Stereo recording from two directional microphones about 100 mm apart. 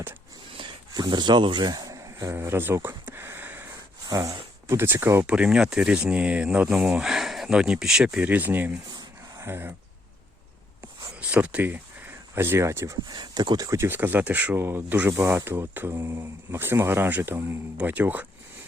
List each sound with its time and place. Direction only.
0.5 s a sound: 50° right (ahead or behind); by 2.3 s 35° right (ahead or behind)
2.3 s a sound: 25° right (ahead or behind)
4.1 s speech: 35° right (ahead or behind)
5.2 s speech: 10° right (ahead or behind)
11.2 s speech: 15° right (ahead or behind); by 13.0 s 30° right (ahead or behind)
13.1 s speech: 45° right (ahead or behind)
13.7 s speech: 25° right (ahead or behind)